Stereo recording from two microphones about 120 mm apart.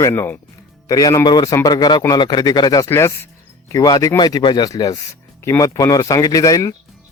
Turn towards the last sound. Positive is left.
turn(degrees=30)  # may be behind; listen again after turning